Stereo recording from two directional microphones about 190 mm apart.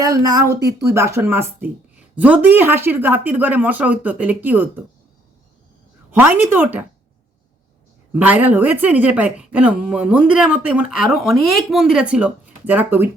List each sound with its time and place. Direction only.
0.0 s speech: 20° right (ahead or behind)
6.1 s speech: 10° right (ahead or behind)
8.1 s speech: 10° right (ahead or behind)